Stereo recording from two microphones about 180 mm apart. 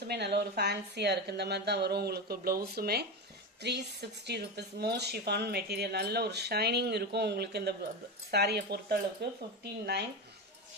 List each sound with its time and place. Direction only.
0.1 s speech: 65° right (ahead or behind)